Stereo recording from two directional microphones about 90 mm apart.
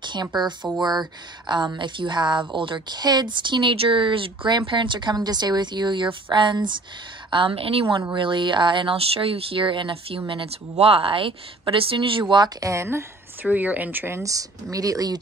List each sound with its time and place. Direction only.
0.0 s a sound: 55° right (ahead or behind)
0.7 s a woman's voice: 50° right (ahead or behind); by 7.8 s 90° right
8.1 s speech: 60° right (ahead or behind)
12.5 s speech: 35° right (ahead or behind)
13.5 s speech: 15° right (ahead or behind)
14.2 s speech: 40° right (ahead or behind)